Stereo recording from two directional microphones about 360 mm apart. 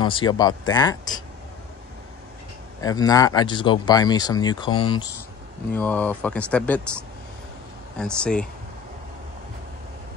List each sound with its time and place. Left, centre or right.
0.0 s speech: centre
2.8 s speech: centre